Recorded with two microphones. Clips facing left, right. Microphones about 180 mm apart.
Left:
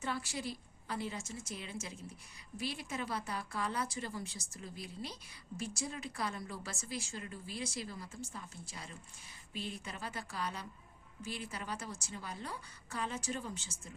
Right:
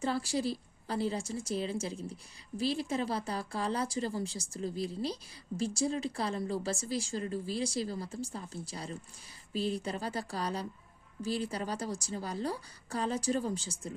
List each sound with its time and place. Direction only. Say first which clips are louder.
0.0 s speech: right 8 dB; 30° right (ahead or behind)